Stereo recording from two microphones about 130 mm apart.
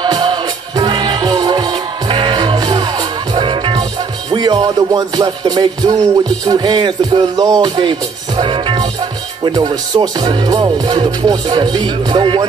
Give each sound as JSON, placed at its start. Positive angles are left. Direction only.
{"t": 0.0, "sound": "music", "side_deg": -35}
{"t": 4.3, "sound": "speech", "side_deg": -35}
{"t": 8.4, "sound": "music", "side_deg": -40}
{"t": 9.4, "sound": "speech", "side_deg": -35}